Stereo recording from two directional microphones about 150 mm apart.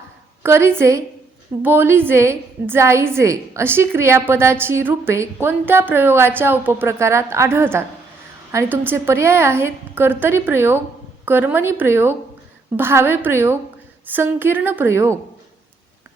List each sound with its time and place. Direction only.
0.4 s a woman's voice: 15° right (ahead or behind)